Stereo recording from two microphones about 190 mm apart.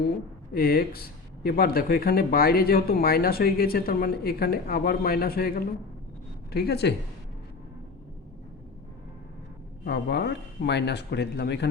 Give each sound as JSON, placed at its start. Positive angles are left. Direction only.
{"t": 0.5, "sound": "speech", "side_deg": 50}
{"t": 9.8, "sound": "speech", "side_deg": 65}